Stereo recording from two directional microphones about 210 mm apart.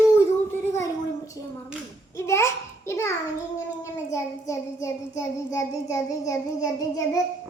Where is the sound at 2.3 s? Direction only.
15° left (ahead or behind).